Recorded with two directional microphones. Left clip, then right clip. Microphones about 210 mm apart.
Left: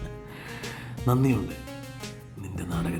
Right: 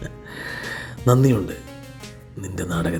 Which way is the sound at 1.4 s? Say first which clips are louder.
Right 6 dB; centre (ahead or behind).